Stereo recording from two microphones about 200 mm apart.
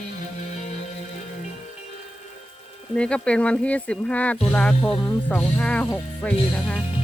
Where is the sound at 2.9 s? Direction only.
5° left (ahead or behind).